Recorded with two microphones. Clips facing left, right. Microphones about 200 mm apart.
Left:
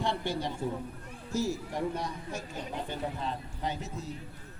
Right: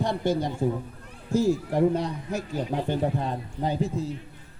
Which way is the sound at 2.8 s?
50° right (ahead or behind).